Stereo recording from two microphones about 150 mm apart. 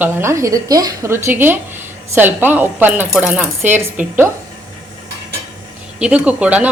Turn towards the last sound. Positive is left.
turn(degrees=-10)  # may be behind; listen again after turning